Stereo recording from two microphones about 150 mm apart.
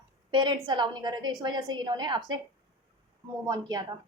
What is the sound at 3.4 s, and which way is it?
Speech, 25° right (ahead or behind).